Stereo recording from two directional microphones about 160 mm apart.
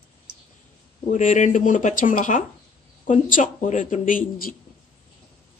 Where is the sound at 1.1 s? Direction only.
50° left (ahead or behind).